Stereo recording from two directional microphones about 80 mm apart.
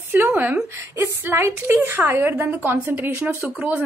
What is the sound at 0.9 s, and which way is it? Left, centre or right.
A woman's voice, right.